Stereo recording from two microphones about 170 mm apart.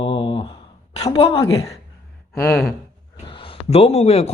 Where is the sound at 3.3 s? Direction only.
30° left (ahead or behind).